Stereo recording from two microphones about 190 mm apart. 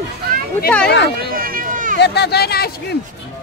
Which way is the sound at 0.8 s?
70° left (ahead or behind).